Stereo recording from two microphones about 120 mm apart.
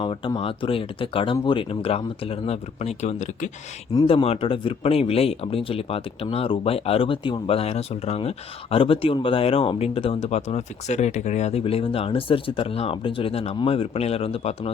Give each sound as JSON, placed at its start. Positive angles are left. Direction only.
{"t": 0.3, "sound": "speech", "side_deg": 50}
{"t": 4.0, "sound": "speech", "side_deg": 55}